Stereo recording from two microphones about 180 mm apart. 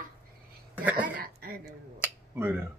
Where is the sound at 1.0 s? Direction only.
50° right (ahead or behind).